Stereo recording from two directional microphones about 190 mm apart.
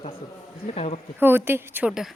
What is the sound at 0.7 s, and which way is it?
Speech, 35° left (ahead or behind).